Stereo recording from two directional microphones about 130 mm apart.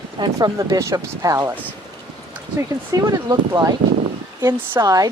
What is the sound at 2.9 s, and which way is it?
Speech, 30° right (ahead or behind).